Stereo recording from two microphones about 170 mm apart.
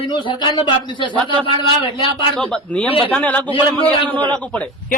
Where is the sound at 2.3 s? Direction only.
5° left (ahead or behind).